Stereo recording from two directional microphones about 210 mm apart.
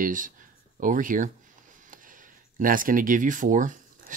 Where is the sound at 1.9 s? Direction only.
40° right (ahead or behind).